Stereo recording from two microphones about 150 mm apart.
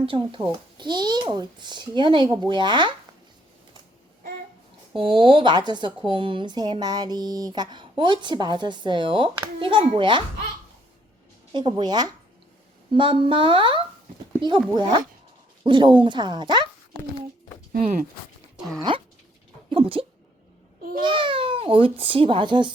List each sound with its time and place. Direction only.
0.0 s speech: 35° right (ahead or behind)
4.9 s speech: 35° right (ahead or behind)
11.5 s speech: 30° right (ahead or behind)
18.8 s speech: 35° right (ahead or behind)